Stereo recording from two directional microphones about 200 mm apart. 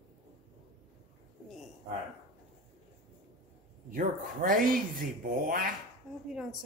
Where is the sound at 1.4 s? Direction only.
Centre (ahead or behind).